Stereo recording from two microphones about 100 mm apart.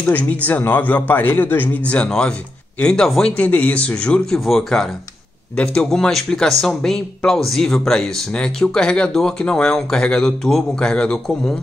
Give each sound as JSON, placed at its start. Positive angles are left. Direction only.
{"t": 0.1, "sound": "speech", "side_deg": 15}